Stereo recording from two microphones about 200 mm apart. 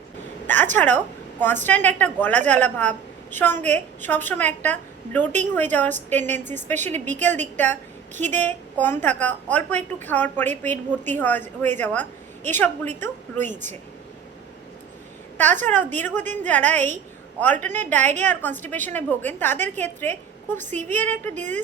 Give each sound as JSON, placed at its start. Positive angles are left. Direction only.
{"t": 0.4, "sound": "a woman's voice", "side_deg": 10}
{"t": 6.4, "sound": "a woman's voice", "side_deg": -35}
{"t": 6.7, "sound": "a woman's voice", "side_deg": 10}
{"t": 15.6, "sound": "a woman's voice", "side_deg": 10}